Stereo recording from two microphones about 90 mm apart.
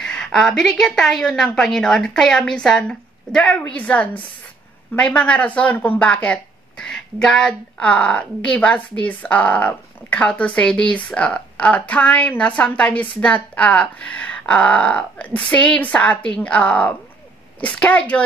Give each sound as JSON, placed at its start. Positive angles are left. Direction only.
{"t": 0.0, "sound": "speech", "side_deg": 5}